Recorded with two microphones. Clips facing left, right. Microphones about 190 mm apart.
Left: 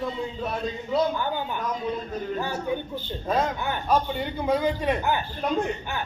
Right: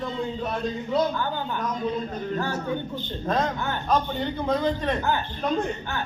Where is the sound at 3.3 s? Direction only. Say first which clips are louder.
Even; 10° left (ahead or behind).